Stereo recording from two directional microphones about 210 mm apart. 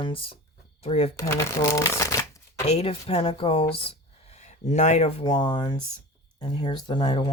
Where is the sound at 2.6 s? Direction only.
30° left (ahead or behind).